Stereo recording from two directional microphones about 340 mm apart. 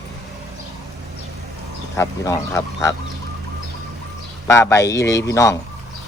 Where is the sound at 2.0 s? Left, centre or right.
Centre.